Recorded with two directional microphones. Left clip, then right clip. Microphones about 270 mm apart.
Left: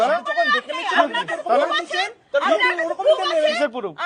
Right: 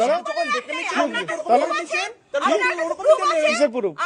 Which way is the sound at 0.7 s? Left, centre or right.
Right.